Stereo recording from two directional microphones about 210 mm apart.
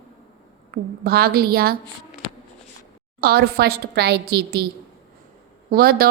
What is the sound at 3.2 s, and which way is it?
A woman's voice, 50° right (ahead or behind).